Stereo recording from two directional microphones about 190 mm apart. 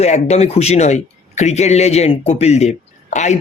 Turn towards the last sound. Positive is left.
turn(degrees=40)  # may be behind; listen again after turning